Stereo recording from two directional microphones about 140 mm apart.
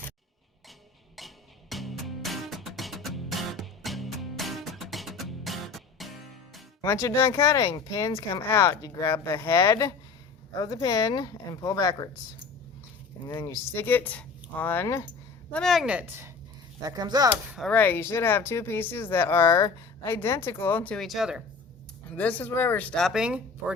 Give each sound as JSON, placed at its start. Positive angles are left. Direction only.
{"t": 1.7, "sound": "music", "side_deg": 0}
{"t": 6.8, "sound": "speech", "side_deg": 20}
{"t": 13.2, "sound": "speech", "side_deg": 20}
{"t": 15.5, "sound": "speech", "side_deg": 0}
{"t": 16.8, "sound": "speech", "side_deg": -30}
{"t": 17.7, "sound": "speech", "side_deg": 15}
{"t": 22.1, "sound": "speech", "side_deg": 10}